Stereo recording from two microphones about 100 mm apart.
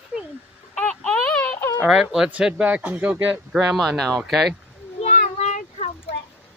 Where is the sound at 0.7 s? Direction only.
10° left (ahead or behind).